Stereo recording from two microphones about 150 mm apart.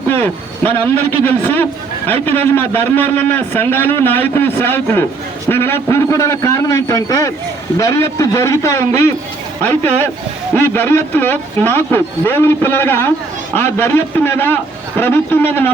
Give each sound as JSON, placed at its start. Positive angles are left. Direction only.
{"t": 0.1, "sound": "speech", "side_deg": 15}
{"t": 2.0, "sound": "a man's voice", "side_deg": 10}